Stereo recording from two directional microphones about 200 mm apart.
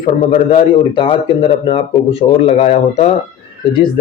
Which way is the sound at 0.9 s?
25° left (ahead or behind).